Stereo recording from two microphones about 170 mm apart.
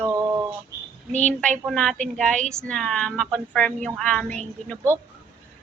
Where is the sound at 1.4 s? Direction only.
5° left (ahead or behind).